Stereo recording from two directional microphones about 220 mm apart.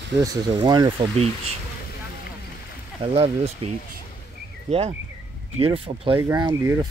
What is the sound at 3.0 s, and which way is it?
Speech, 25° right (ahead or behind).